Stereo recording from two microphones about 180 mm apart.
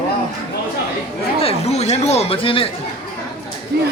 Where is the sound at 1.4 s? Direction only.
35° left (ahead or behind).